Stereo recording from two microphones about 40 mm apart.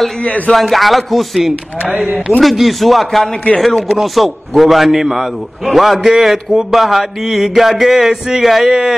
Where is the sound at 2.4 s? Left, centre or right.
Centre.